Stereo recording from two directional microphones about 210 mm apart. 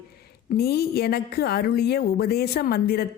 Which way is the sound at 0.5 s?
50° left (ahead or behind).